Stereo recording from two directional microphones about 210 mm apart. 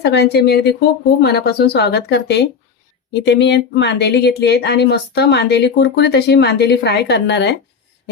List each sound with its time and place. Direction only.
0.0 s speech: 50° left (ahead or behind)